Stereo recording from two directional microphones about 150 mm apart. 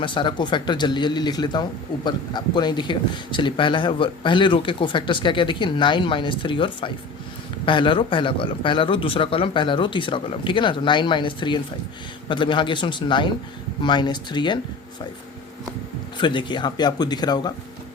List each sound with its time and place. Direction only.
0.0 s speech: 30° left (ahead or behind)
16.1 s speech: 30° left (ahead or behind)